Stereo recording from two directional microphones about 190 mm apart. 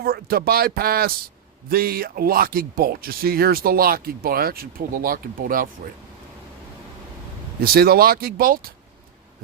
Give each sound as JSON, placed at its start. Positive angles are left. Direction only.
{"t": 0.0, "sound": "speech", "side_deg": -55}
{"t": 7.6, "sound": "speech", "side_deg": -55}